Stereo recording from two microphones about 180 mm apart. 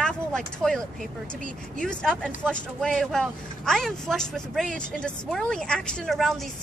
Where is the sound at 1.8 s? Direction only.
5° left (ahead or behind).